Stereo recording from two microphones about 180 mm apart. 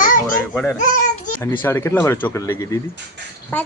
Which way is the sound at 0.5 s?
5° left (ahead or behind).